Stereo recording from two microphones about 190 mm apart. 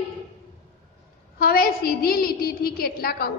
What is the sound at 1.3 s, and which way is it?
A woman's voice, 50° left (ahead or behind).